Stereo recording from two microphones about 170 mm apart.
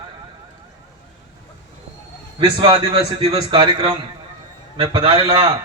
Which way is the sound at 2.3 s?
30° right (ahead or behind).